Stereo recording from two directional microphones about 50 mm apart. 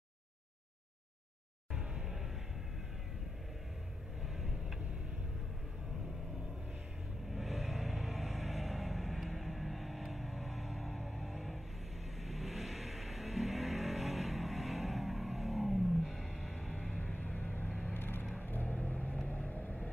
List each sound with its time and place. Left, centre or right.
1.7 s music: centre
4.4 s tick-tock: centre
7.2 s music: centre
12.2 s vehicle: centre
16.7 s music: left
17.0 s vehicle: left
17.9 s vehicle: left